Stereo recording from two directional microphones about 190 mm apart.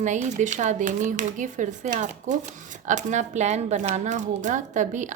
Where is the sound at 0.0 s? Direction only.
40° right (ahead or behind).